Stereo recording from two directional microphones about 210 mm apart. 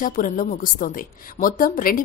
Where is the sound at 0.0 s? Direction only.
40° left (ahead or behind).